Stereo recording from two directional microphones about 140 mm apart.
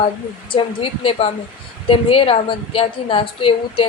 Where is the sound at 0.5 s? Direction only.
40° left (ahead or behind).